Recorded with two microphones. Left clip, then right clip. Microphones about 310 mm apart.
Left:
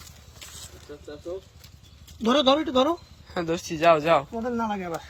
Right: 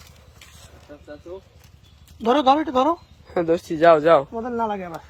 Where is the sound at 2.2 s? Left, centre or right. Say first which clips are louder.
Right 4 dB; centre.